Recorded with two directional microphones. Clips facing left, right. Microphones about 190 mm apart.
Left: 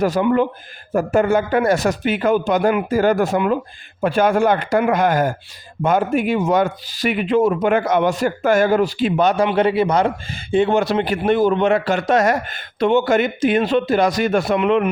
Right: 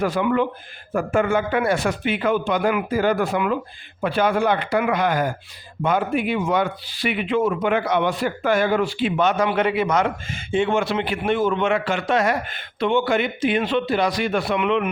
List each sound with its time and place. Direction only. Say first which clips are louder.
0.0 s a man's voice: left 4 dB; 40° left (ahead or behind)